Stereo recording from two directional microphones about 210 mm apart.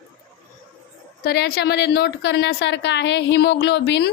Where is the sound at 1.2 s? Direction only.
50° left (ahead or behind).